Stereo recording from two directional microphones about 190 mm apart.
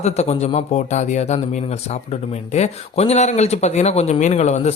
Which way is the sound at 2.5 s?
35° left (ahead or behind).